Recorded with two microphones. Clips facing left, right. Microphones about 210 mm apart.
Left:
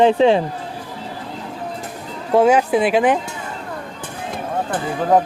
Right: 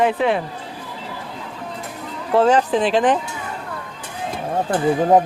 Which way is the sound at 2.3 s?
10° left (ahead or behind).